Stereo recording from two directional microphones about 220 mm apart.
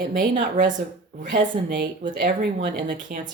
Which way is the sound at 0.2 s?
35° right (ahead or behind).